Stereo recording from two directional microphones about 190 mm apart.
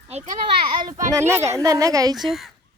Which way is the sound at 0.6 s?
25° right (ahead or behind).